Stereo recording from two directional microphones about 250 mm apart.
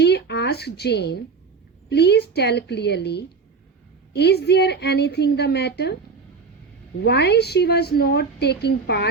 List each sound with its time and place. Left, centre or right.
0.0 s a sound: left
1.9 s a woman's voice: left
7.0 s a woman's voice: left